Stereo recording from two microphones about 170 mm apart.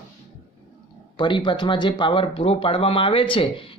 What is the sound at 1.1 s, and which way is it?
Speech, 25° left (ahead or behind).